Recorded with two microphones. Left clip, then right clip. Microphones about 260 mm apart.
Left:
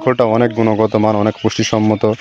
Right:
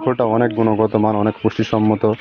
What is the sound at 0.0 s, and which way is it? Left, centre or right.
Speech, left.